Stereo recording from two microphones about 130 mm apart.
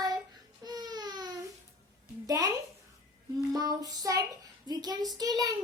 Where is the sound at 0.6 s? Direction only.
30° right (ahead or behind).